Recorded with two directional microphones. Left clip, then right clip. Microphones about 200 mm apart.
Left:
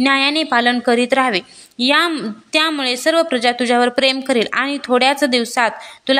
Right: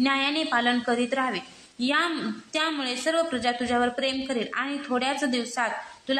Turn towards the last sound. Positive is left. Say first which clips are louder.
# left 11 dB
turn(degrees=45)  # may be behind; listen again after turning